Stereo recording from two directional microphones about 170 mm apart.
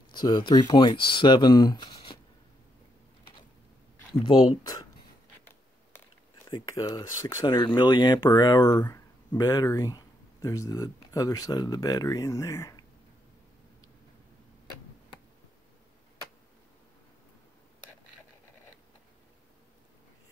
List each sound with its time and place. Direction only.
0.1 s speech: 25° left (ahead or behind)
4.2 s speech: 25° left (ahead or behind)
6.5 s speech: 20° left (ahead or behind)